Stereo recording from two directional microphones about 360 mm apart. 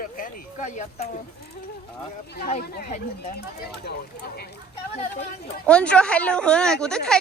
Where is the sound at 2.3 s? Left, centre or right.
Left.